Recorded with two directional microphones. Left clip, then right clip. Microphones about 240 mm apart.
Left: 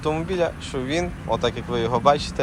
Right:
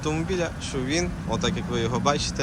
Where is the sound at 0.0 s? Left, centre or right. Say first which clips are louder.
Left 4 dB; centre.